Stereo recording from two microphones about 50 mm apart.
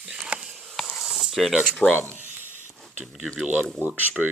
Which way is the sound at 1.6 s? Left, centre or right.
Left.